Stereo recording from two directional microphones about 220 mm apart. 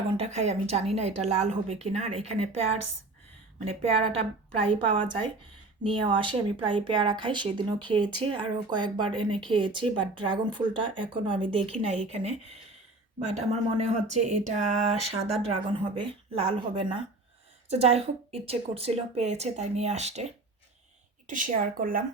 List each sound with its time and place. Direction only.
0.2 s speech: 30° right (ahead or behind)
5.8 s speech: 25° right (ahead or behind)
21.2 s speech: 35° right (ahead or behind)